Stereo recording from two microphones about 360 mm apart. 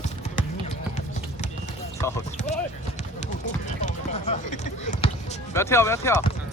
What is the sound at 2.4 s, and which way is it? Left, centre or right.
Clip-clop, centre.